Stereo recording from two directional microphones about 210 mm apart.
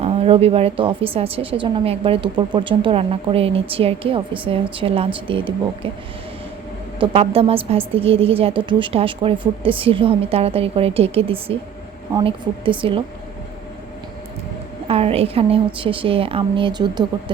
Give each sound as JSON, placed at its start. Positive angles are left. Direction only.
{"t": 0.0, "sound": "a woman's voice", "side_deg": -30}
{"t": 7.0, "sound": "a woman's voice", "side_deg": -25}
{"t": 14.8, "sound": "a woman's voice", "side_deg": -30}